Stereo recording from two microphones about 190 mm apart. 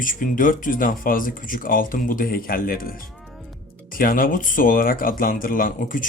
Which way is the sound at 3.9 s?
45° left (ahead or behind).